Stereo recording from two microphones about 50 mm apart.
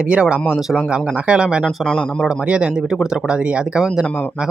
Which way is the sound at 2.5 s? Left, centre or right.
Right.